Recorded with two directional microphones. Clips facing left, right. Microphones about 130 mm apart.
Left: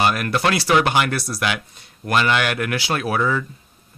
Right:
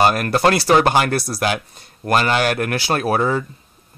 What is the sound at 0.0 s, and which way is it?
Speech, 40° right (ahead or behind).